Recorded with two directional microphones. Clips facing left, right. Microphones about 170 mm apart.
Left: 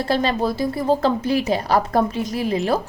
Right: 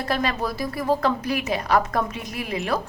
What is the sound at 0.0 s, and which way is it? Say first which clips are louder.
A woman's voice: left 5 dB; 30° left (ahead or behind).